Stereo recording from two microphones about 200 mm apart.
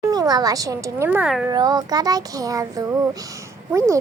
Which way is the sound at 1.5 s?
20° right (ahead or behind).